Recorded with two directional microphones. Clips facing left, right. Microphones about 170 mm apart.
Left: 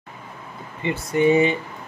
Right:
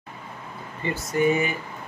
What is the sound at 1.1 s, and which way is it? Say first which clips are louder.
Speech: left 5 dB; 25° left (ahead or behind).